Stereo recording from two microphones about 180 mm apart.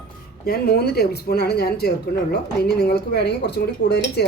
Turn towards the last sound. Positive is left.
turn(degrees=65)  # may be behind; listen again after turning